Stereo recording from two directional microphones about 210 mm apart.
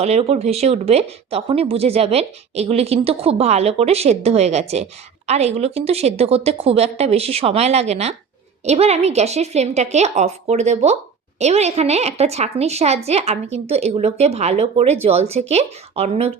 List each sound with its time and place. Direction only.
0.0 s a woman's voice: 30° right (ahead or behind)